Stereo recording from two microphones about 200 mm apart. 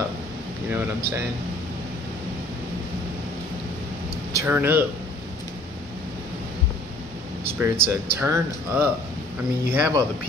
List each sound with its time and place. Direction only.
0.7 s speech: 10° right (ahead or behind)
4.3 s speech: 15° right (ahead or behind)
7.4 s speech: 10° right (ahead or behind)